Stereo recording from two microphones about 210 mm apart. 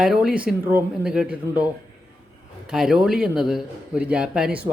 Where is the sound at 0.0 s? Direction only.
5° right (ahead or behind).